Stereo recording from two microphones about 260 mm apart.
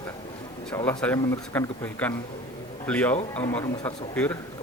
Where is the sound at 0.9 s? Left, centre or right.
Centre.